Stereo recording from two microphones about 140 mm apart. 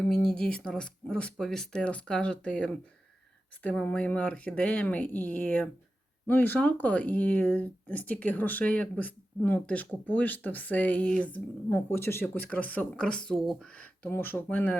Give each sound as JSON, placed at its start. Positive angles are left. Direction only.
{"t": 0.0, "sound": "speech", "side_deg": 5}